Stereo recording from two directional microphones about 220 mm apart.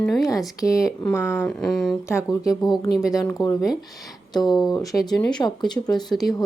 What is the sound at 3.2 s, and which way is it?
Speech, 10° left (ahead or behind).